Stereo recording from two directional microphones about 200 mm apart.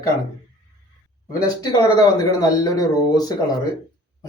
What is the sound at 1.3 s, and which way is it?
Speech, 20° left (ahead or behind).